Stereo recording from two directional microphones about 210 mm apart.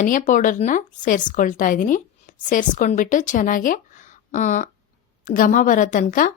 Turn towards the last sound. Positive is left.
turn(degrees=40)  # may be behind; listen again after turning